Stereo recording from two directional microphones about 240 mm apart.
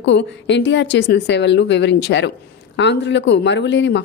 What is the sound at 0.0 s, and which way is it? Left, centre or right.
Speech, left.